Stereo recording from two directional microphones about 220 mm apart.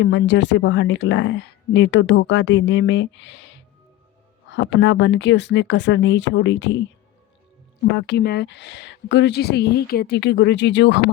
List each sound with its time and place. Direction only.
0.0 s speech: 55° left (ahead or behind)
7.9 s speech: 50° left (ahead or behind)